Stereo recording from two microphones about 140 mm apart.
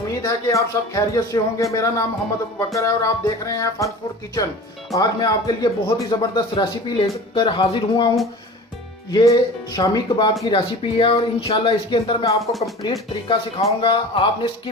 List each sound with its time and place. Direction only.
0.1 s speech: 25° left (ahead or behind)
4.9 s speech: 25° left (ahead or behind)
12.8 s speech: 30° left (ahead or behind)
13.8 s speech: 40° left (ahead or behind)